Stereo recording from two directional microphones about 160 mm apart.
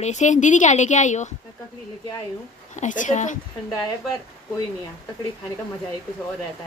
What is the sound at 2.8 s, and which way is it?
Speech, 50° left (ahead or behind).